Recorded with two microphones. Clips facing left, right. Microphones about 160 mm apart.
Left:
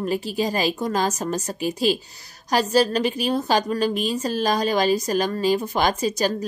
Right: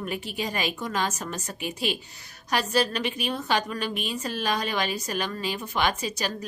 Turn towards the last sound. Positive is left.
turn(degrees=40)  # may be behind; listen again after turning